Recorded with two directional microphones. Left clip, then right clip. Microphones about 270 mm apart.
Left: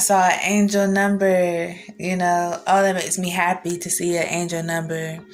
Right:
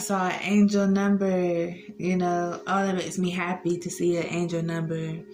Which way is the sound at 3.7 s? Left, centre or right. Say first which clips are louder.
Left 1 dB; left.